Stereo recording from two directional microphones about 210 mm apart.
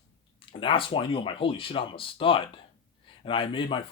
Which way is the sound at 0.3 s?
25° left (ahead or behind).